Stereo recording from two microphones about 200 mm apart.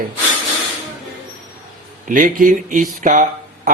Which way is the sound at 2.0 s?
40° right (ahead or behind).